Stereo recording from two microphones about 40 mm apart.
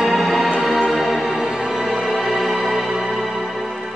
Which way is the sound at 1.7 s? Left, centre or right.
Centre.